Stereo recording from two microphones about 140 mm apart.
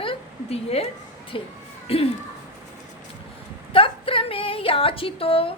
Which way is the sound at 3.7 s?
40° left (ahead or behind).